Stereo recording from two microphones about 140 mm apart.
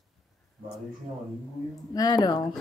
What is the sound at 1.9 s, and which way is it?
Speech, 25° left (ahead or behind).